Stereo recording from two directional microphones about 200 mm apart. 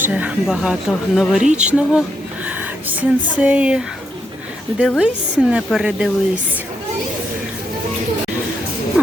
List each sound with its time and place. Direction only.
0.0 s speech: 5° right (ahead or behind)
1.5 s speech: 35° right (ahead or behind)
1.7 s speech: 5° right (ahead or behind)
4.9 s speech: 5° right (ahead or behind)